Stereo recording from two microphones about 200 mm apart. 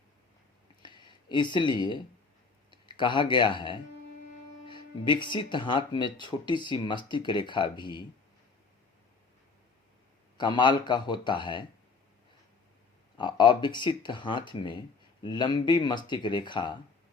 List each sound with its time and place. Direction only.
0.8 s a sound: 25° left (ahead or behind)
2.6 s speech: 25° left (ahead or behind)
10.3 s speech: 20° left (ahead or behind)
13.1 s speech: 20° left (ahead or behind)